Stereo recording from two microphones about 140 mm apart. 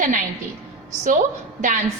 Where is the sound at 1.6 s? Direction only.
65° right (ahead or behind).